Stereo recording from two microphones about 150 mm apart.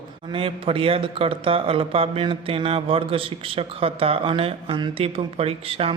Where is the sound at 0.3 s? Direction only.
35° right (ahead or behind).